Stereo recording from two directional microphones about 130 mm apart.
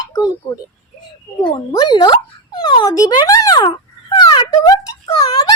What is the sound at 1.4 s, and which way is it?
A child's voice, 35° left (ahead or behind).